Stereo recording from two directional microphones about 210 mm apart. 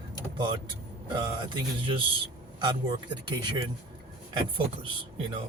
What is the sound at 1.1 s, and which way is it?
Speech, 20° right (ahead or behind).